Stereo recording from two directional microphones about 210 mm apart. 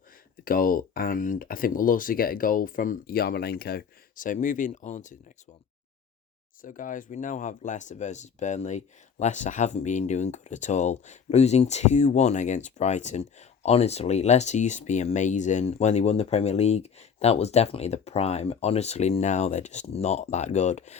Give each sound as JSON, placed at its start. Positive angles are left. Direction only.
{"t": 0.4, "sound": "speech", "side_deg": 40}
{"t": 6.6, "sound": "speech", "side_deg": 40}